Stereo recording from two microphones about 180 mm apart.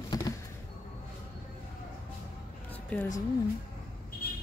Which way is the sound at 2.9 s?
5° left (ahead or behind).